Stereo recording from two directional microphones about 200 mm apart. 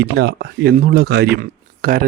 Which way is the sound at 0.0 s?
55° right (ahead or behind).